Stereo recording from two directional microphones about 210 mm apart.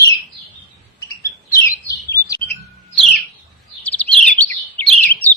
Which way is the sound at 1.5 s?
15° left (ahead or behind).